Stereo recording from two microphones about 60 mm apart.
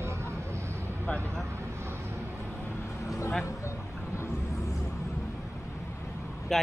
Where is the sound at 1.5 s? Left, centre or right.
Right.